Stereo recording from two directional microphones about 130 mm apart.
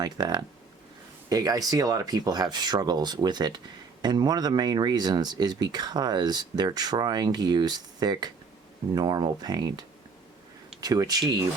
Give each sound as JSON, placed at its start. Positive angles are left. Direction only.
{"t": 0.0, "sound": "speech", "side_deg": -30}